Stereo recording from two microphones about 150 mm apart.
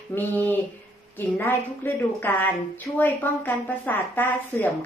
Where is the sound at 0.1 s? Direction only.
15° left (ahead or behind).